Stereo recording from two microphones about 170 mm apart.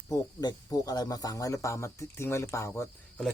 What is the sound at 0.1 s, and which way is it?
Speech, 20° left (ahead or behind).